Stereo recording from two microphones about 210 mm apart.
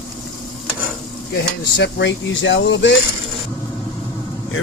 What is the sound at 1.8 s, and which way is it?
Speech, 55° left (ahead or behind).